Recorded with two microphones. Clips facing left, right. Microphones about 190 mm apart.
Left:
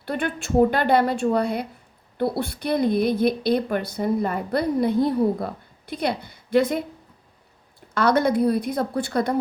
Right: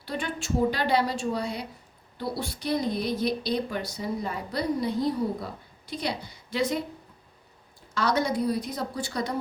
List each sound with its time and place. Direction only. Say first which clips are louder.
0.0 s a woman's voice: left 6 dB; 55° left (ahead or behind)
7.9 s a woman's voice: left 6 dB; 55° left (ahead or behind)